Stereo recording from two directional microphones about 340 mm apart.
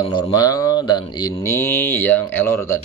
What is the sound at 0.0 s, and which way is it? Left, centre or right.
Speech, centre.